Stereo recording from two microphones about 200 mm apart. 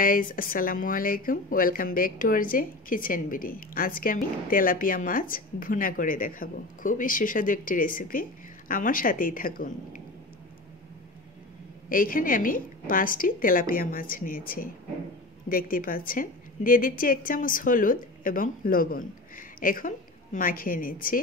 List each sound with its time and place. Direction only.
0.0 s speech: 45° left (ahead or behind)
11.9 s speech: 45° left (ahead or behind)